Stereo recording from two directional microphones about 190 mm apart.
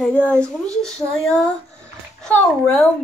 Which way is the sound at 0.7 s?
5° left (ahead or behind).